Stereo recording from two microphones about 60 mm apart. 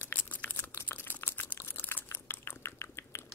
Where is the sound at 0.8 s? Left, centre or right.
Left.